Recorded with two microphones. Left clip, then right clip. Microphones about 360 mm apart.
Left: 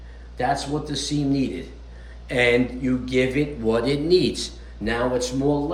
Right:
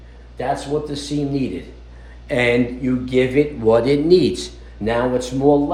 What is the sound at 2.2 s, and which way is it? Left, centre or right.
A man's voice, centre.